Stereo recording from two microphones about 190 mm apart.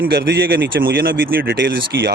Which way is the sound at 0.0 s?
60° right (ahead or behind).